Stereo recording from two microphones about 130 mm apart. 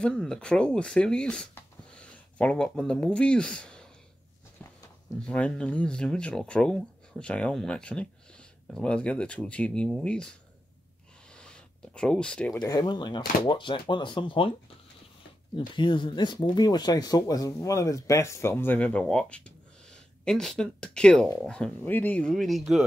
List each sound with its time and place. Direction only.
0.0 s speech: 5° left (ahead or behind)
5.2 s speech: 10° left (ahead or behind)
11.3 s a sound: 5° left (ahead or behind)
12.5 s speech: 35° left (ahead or behind)
15.7 s speech: 40° left (ahead or behind); by 22.8 s centre (ahead or behind)